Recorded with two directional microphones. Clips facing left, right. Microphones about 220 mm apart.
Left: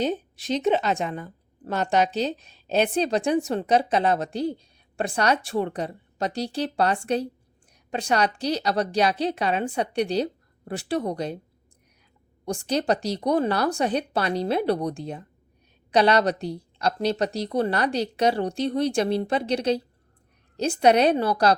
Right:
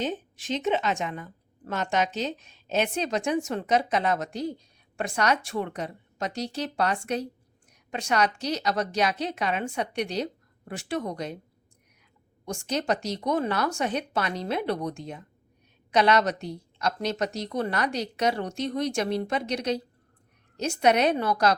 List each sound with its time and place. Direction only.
0.0 s a woman's voice: 35° left (ahead or behind)
12.5 s a woman's voice: 35° left (ahead or behind)